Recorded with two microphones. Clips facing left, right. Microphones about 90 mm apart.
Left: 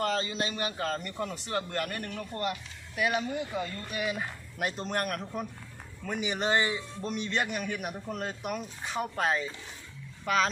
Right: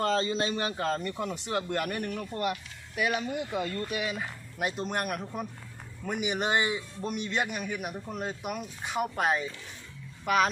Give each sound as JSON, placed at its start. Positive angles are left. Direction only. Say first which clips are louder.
{"t": 0.0, "sound": "a man's voice", "louder": "right 3 dB", "side_deg": -30}
{"t": 1.3, "sound": "a man's voice", "louder": "right 2 dB", "side_deg": -20}